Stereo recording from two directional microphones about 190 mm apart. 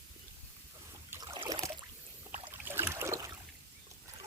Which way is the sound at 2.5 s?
10° right (ahead or behind).